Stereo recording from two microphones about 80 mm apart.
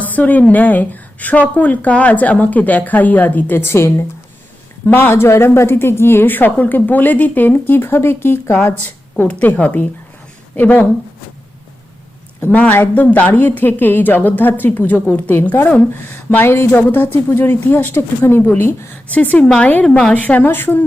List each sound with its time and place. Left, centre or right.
0.0 s a woman's voice: left
12.4 s a woman's voice: centre
19.1 s a woman's voice: centre